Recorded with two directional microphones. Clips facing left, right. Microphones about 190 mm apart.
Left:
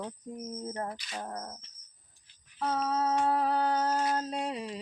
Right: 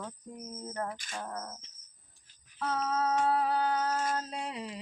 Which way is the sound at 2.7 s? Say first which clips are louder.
Left 1 dB; 30° left (ahead or behind).